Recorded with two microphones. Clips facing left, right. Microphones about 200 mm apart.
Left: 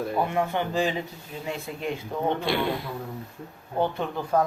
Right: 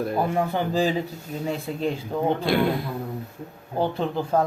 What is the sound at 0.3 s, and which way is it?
Speech, 35° right (ahead or behind).